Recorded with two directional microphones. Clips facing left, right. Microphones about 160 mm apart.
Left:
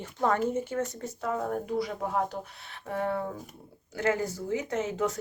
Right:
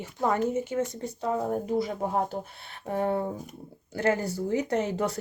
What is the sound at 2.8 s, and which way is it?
Speech, 35° right (ahead or behind).